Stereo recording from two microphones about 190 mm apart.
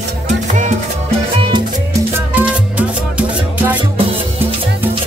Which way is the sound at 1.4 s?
25° right (ahead or behind).